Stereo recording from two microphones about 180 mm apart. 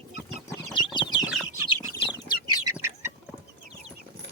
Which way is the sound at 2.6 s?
15° right (ahead or behind).